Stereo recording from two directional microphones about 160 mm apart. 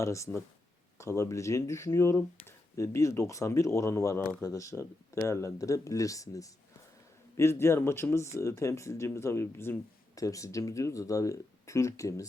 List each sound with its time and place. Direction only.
0.0 s speech: 20° left (ahead or behind)